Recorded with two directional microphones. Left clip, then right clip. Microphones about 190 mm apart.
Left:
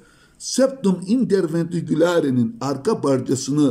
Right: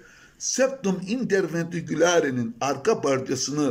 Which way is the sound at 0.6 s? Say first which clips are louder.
Left 5 dB; 30° left (ahead or behind).